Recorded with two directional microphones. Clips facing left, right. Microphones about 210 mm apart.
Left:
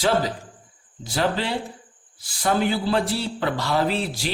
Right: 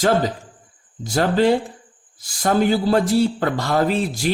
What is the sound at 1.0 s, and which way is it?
Speech, 45° right (ahead or behind).